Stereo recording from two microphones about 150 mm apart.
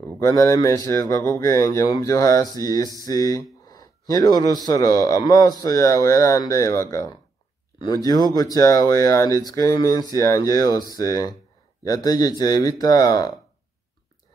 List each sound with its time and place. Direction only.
0.2 s speech: 25° left (ahead or behind)
3.1 s a sound: 25° left (ahead or behind)
4.6 s speech: 25° left (ahead or behind)